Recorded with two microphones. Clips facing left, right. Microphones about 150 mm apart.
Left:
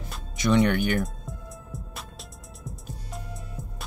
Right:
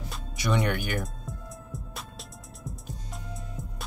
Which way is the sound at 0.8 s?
Centre (ahead or behind).